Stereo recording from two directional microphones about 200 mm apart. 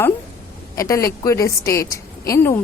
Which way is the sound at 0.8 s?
15° left (ahead or behind).